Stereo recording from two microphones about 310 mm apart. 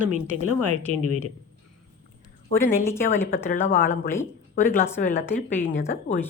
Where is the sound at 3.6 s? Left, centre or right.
Left.